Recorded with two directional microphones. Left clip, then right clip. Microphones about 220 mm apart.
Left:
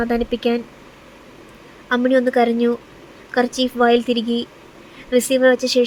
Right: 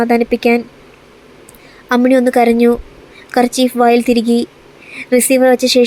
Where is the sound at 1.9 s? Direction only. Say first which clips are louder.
Right 5 dB; 20° right (ahead or behind).